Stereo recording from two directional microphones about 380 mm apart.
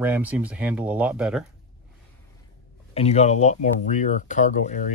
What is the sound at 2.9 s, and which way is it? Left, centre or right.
Speech, centre.